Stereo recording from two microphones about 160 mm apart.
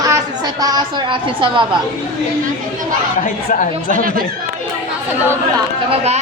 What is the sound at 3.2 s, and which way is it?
Speech, 55° left (ahead or behind).